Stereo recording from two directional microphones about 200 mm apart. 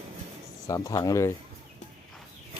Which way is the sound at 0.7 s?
15° left (ahead or behind).